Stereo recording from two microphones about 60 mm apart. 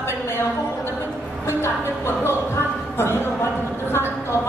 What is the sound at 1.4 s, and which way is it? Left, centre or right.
Music, left.